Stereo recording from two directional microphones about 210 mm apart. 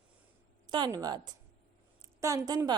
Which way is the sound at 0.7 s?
20° right (ahead or behind).